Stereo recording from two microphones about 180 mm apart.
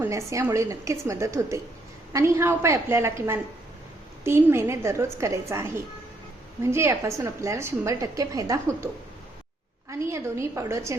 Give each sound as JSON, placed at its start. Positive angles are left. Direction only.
{"t": 0.0, "sound": "a woman's voice", "side_deg": -15}
{"t": 10.0, "sound": "a woman's voice", "side_deg": -15}